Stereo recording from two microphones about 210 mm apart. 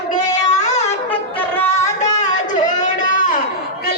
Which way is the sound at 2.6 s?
35° left (ahead or behind).